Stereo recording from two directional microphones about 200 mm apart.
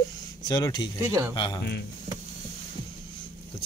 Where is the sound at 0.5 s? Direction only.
20° left (ahead or behind).